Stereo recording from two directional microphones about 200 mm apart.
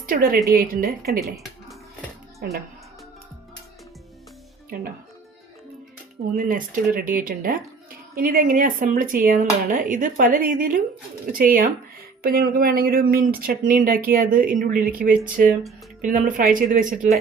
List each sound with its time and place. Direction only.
0.0 s a woman's voice: 45° right (ahead or behind)
2.4 s speech: 50° right (ahead or behind)
4.7 s speech: 45° right (ahead or behind)
6.3 s speech: 45° right (ahead or behind)